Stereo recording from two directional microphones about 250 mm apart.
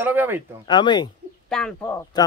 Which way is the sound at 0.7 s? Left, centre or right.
Centre.